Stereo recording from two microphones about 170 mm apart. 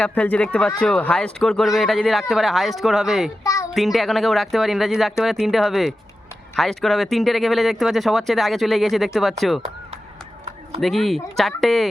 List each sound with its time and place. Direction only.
0.0 s speech: 10° left (ahead or behind)
3.4 s a sound: 20° left (ahead or behind)
3.8 s speech: centre (ahead or behind)
10.8 s speech: centre (ahead or behind)